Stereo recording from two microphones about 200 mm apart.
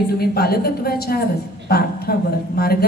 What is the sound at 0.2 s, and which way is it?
A woman's voice, 50° left (ahead or behind).